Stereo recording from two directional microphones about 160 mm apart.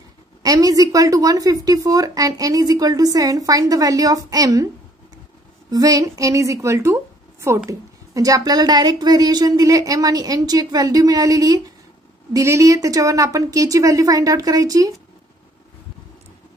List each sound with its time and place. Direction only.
0.4 s a woman's voice: 20° right (ahead or behind)
5.7 s a woman's voice: 20° right (ahead or behind)